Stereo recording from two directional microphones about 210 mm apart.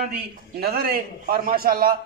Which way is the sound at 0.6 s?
50° right (ahead or behind).